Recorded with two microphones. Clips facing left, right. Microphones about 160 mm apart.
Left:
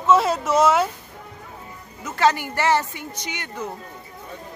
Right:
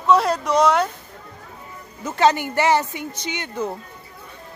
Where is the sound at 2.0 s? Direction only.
20° right (ahead or behind).